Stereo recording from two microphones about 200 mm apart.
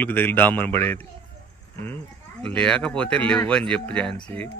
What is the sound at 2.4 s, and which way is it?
Speech, 5° left (ahead or behind).